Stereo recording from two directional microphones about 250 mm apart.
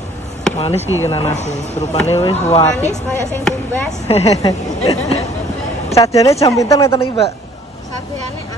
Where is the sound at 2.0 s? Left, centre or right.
Left.